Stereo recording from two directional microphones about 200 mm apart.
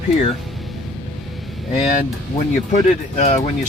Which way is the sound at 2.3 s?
35° left (ahead or behind).